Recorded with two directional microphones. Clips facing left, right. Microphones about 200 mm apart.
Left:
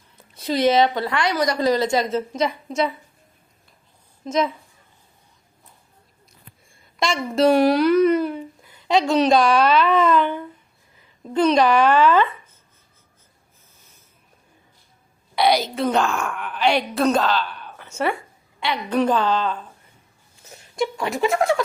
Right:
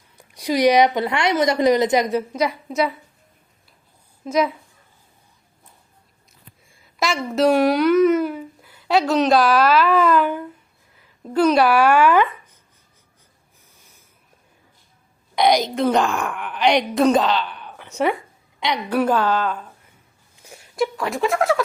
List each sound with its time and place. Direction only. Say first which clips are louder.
0.2 s speech: right 2 dB; 15° right (ahead or behind)
4.2 s a woman's voice: right 2 dB; 5° right (ahead or behind)
7.0 s speech: even; 5° right (ahead or behind)
15.4 s speech: right 2 dB; 15° right (ahead or behind)
16.1 s speech: right 1 dB; centre (ahead or behind)
16.5 s a woman's voice: right 2 dB; 15° right (ahead or behind)
20.3 s a sound: right 2 dB; 15° right (ahead or behind)
20.7 s speech: right 1 dB; centre (ahead or behind)